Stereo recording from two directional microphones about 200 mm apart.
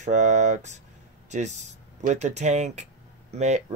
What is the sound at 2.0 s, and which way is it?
Speech, 35° right (ahead or behind).